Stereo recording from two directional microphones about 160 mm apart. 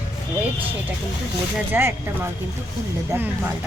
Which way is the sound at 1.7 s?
15° right (ahead or behind).